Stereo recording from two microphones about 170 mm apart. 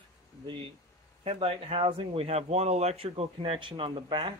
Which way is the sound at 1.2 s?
35° right (ahead or behind).